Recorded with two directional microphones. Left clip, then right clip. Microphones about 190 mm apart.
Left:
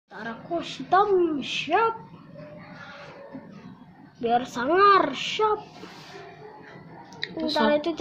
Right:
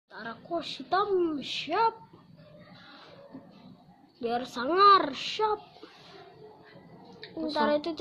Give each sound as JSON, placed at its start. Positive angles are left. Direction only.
{"t": 0.1, "sound": "a woman's voice", "side_deg": -20}
{"t": 4.2, "sound": "speech", "side_deg": -10}
{"t": 7.5, "sound": "speech", "side_deg": -10}